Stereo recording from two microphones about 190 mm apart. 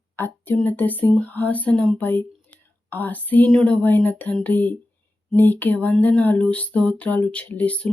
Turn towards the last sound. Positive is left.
turn(degrees=5)  # may be behind; listen again after turning